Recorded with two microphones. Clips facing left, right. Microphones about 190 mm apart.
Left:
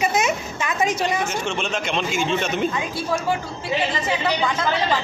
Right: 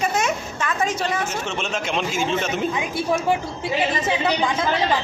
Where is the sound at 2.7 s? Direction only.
20° right (ahead or behind).